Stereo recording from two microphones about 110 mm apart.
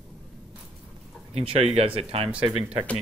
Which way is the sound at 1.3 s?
70° right (ahead or behind).